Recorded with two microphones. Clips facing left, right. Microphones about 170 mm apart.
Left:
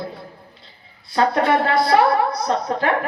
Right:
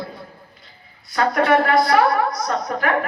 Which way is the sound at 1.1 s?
30° left (ahead or behind).